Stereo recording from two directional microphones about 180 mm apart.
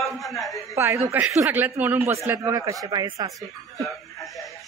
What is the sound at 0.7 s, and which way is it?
Speech, 15° right (ahead or behind).